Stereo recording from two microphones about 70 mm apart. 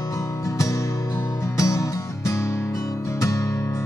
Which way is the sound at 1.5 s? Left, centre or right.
Left.